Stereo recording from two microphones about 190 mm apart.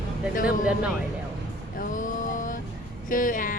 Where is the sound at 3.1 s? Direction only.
45° left (ahead or behind).